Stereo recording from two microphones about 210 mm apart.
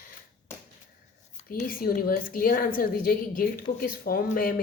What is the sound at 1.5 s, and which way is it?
A woman's voice, 45° left (ahead or behind).